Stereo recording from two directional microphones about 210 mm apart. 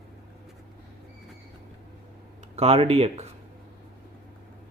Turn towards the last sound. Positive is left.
turn(degrees=-30)  # may be behind; listen again after turning